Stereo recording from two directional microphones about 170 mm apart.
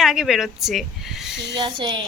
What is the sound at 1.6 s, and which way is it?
Speech, 30° right (ahead or behind).